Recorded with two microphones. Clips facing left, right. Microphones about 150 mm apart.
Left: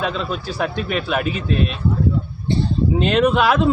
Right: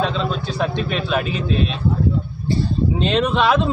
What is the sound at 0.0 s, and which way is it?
A man's voice, 5° left (ahead or behind).